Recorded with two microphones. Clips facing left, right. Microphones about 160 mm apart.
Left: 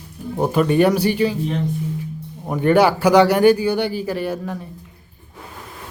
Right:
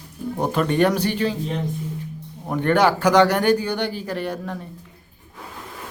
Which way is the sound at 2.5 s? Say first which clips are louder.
Left 3 dB; 10° left (ahead or behind).